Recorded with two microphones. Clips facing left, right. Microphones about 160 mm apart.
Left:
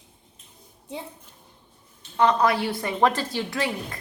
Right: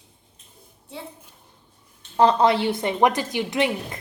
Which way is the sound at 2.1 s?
30° right (ahead or behind).